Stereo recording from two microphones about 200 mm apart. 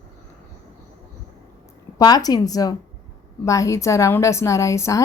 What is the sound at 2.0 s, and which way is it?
A woman's voice, 20° left (ahead or behind).